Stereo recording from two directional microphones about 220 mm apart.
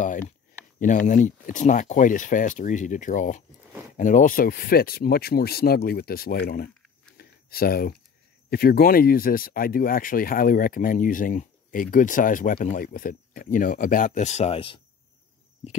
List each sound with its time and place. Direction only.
0.7 s speech: 35° left (ahead or behind)
7.2 s a sound: 45° left (ahead or behind)
8.5 s speech: 45° left (ahead or behind); by 14.8 s 25° left (ahead or behind)